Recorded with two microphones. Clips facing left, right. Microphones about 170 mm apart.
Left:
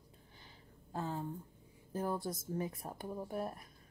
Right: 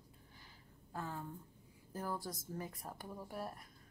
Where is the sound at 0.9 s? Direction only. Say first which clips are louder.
Left 5 dB; 25° left (ahead or behind).